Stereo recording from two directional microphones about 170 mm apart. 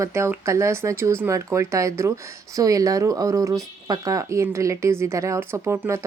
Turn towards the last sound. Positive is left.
turn(degrees=-15)  # may be behind; listen again after turning